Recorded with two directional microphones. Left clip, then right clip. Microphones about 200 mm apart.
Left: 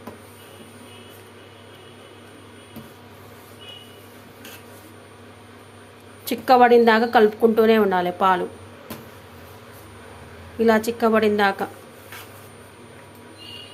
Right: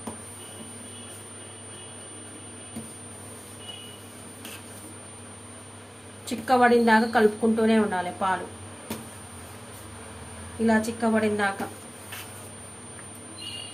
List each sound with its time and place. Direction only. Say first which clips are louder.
6.2 s a woman's voice: left 6 dB; 45° left (ahead or behind)
10.7 s a woman's voice: left 6 dB; 50° left (ahead or behind)